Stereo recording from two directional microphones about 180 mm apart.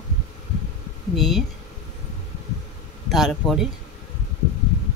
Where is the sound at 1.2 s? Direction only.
Centre (ahead or behind).